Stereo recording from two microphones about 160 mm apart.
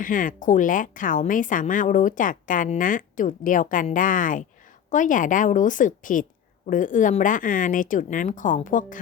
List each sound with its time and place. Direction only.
0.0 s speech: 55° left (ahead or behind)